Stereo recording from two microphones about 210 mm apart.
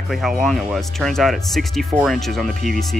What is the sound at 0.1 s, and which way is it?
Speech, centre (ahead or behind).